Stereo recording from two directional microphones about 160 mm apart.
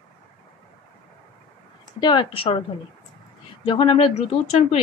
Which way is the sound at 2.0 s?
30° left (ahead or behind).